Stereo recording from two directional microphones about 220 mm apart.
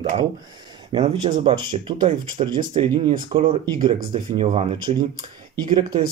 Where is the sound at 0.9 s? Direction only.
25° right (ahead or behind).